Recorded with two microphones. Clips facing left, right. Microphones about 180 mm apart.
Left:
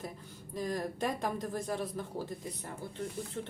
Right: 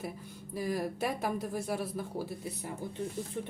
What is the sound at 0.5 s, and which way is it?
A woman's voice, 10° right (ahead or behind).